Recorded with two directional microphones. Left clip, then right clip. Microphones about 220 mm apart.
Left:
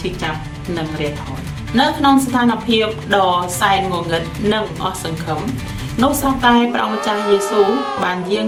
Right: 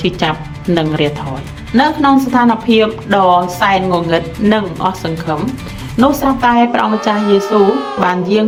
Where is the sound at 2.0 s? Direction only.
30° right (ahead or behind).